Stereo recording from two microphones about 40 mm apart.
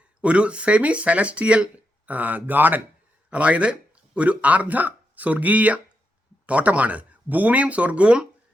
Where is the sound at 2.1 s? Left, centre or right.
Right.